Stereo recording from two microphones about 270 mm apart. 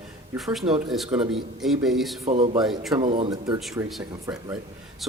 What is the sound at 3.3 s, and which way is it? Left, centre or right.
Speech, centre.